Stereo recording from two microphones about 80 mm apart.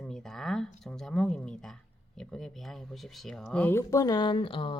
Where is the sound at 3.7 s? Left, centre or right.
Left.